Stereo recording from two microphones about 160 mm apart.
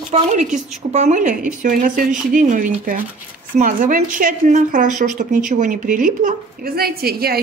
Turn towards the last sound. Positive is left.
turn(degrees=-70)  # may be behind; listen again after turning